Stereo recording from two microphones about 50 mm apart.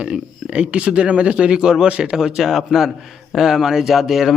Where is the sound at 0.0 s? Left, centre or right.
Right.